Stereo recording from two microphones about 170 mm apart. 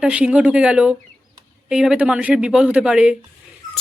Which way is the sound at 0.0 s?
5° right (ahead or behind).